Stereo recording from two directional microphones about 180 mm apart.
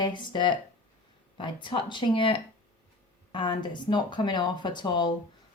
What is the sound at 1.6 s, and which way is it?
Speech, 25° left (ahead or behind).